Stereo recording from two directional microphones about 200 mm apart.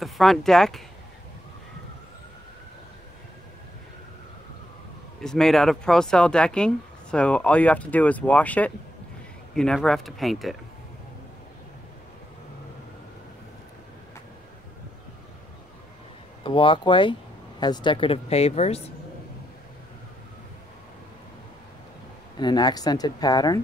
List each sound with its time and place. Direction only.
0.0 s speech: centre (ahead or behind)
5.2 s speech: 5° left (ahead or behind)
16.4 s speech: 25° left (ahead or behind)
22.4 s speech: 20° left (ahead or behind)